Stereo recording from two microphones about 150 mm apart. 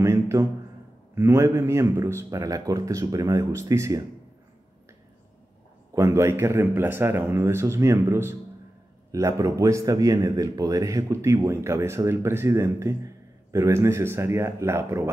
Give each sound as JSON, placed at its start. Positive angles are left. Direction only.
{"t": 0.0, "sound": "a sound", "side_deg": -20}
{"t": 1.1, "sound": "a man's voice", "side_deg": -20}
{"t": 5.9, "sound": "a man's voice", "side_deg": -20}